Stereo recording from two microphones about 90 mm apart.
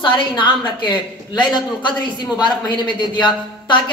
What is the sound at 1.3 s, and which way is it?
A man's voice, 55° left (ahead or behind).